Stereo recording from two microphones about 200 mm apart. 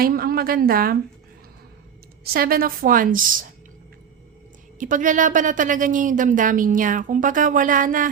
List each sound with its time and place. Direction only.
0.0 s a woman's voice: 45° right (ahead or behind)
2.2 s a woman's voice: 50° right (ahead or behind)
4.8 s a woman's voice: 40° right (ahead or behind)